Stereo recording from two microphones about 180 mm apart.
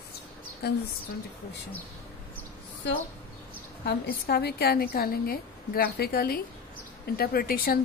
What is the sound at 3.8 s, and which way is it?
A woman's voice, 60° left (ahead or behind).